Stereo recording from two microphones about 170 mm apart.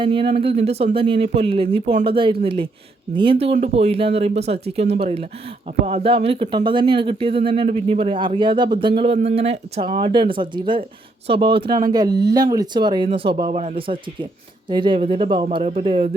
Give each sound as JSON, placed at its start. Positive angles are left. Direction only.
{"t": 0.0, "sound": "speech", "side_deg": -30}